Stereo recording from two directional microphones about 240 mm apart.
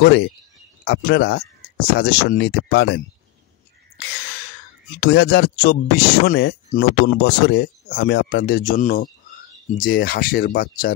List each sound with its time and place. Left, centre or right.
0.0 s speech: left
4.9 s speech: left